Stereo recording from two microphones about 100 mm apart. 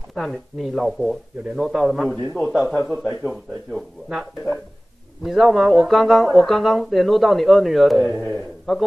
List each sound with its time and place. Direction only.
0.1 s a man's voice: centre (ahead or behind)